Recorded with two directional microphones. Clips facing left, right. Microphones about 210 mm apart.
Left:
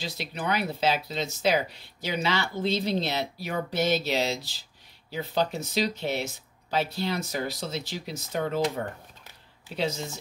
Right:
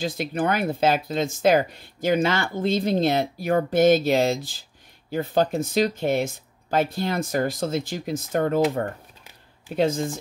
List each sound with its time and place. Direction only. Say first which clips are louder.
0.0 s speech: right 8 dB; 50° right (ahead or behind)
9.8 s speech: right 8 dB; 50° right (ahead or behind)